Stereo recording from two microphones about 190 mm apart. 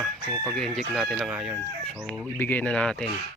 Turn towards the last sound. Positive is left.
turn(degrees=5)  # may be behind; listen again after turning